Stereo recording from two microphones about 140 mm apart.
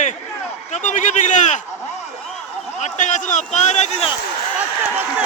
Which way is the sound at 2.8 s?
60° left (ahead or behind).